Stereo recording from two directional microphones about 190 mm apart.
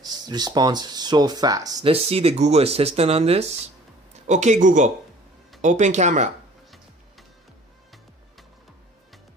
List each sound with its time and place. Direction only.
0.0 s speech: 20° right (ahead or behind)
1.9 s speech: 30° right (ahead or behind)